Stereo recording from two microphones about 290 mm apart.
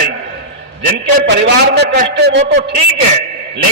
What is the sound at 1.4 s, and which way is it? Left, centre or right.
A man's voice, right.